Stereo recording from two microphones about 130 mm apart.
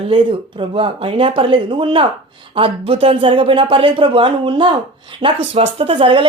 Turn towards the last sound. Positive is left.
turn(degrees=-40)  # may be behind; listen again after turning